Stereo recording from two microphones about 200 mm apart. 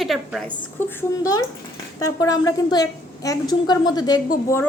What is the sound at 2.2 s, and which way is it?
A woman's voice, 15° left (ahead or behind).